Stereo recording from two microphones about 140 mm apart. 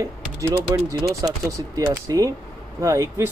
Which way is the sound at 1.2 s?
25° right (ahead or behind).